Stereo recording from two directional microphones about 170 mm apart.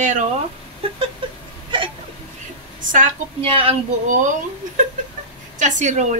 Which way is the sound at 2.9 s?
50° right (ahead or behind).